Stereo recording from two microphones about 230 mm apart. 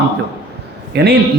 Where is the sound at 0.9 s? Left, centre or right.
Right.